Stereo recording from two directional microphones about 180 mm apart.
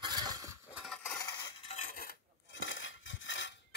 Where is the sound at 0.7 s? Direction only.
Centre (ahead or behind).